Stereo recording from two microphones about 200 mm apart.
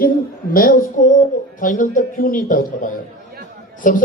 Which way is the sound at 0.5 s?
45° left (ahead or behind).